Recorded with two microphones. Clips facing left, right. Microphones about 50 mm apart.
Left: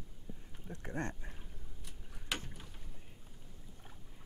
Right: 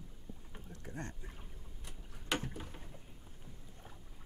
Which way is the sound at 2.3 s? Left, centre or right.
Centre.